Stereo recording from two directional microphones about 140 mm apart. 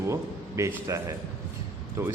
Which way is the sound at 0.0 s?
20° right (ahead or behind).